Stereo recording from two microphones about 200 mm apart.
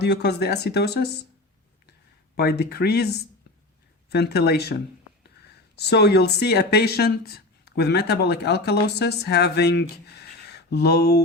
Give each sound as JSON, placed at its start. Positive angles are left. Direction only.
{"t": 0.0, "sound": "speech", "side_deg": 55}
{"t": 2.3, "sound": "speech", "side_deg": 55}